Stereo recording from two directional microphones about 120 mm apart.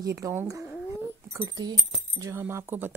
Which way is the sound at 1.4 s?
35° right (ahead or behind).